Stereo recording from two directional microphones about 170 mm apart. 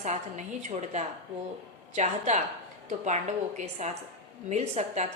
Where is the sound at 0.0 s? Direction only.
45° right (ahead or behind).